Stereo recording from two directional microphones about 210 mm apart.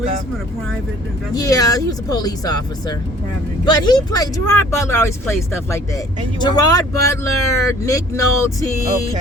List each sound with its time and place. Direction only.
1.4 s speech: 15° left (ahead or behind)